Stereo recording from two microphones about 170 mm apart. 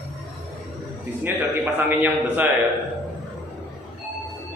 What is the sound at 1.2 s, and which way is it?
A man's voice, 10° right (ahead or behind).